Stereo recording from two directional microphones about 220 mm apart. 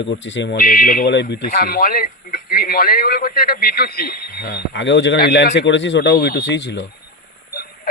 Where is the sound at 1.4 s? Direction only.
40° left (ahead or behind).